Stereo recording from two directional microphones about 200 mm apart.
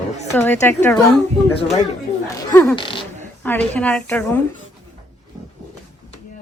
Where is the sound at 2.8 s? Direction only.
25° left (ahead or behind).